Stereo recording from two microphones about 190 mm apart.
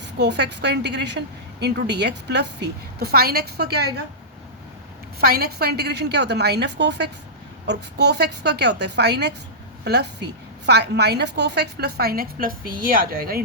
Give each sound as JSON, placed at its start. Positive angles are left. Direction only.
{"t": 0.0, "sound": "a woman's voice", "side_deg": -65}
{"t": 5.2, "sound": "a woman's voice", "side_deg": -55}